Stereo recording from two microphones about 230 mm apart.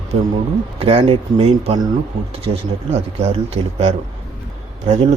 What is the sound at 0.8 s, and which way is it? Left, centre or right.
Speech, right.